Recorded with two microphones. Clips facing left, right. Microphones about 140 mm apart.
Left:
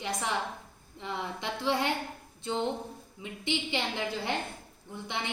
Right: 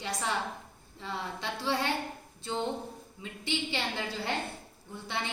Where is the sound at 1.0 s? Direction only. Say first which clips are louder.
Left 1 dB; 15° left (ahead or behind).